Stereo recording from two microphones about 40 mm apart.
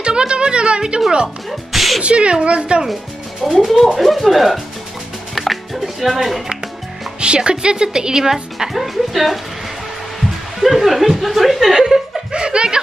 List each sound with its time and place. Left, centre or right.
0.0 s speech: right
1.7 s sneeze: centre
2.0 s a woman's voice: right
3.5 s speech: centre
7.2 s a woman's voice: right; by 9.4 s centre
10.6 s speech: centre
11.7 s speech: centre
12.3 s chuckle: right